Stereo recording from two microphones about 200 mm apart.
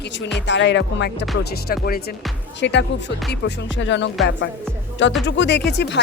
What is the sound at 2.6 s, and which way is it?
Speech, 60° left (ahead or behind).